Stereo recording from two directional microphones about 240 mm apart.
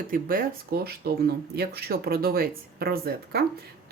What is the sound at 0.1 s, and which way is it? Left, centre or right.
Speech, right.